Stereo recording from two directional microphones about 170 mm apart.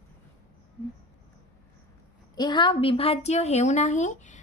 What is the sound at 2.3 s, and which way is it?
A woman's voice, 25° left (ahead or behind).